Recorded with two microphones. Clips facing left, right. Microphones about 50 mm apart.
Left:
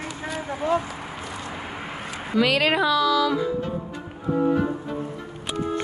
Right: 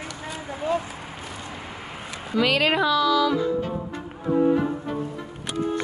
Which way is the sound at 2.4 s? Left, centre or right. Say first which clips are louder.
Left 1 dB; centre.